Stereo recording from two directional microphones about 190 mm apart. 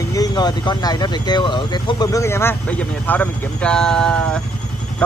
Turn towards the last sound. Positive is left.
turn(degrees=5)  # may be behind; listen again after turning